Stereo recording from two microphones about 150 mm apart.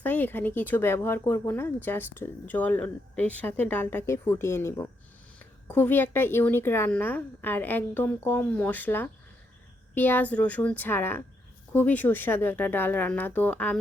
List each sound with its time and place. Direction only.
0.0 s speech: 15° left (ahead or behind)